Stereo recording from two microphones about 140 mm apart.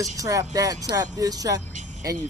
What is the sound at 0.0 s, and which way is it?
Speech, 25° right (ahead or behind).